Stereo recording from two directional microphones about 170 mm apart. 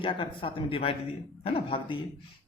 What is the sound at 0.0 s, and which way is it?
Speech, 30° left (ahead or behind).